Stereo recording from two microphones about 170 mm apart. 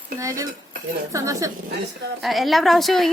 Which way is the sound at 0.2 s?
20° right (ahead or behind).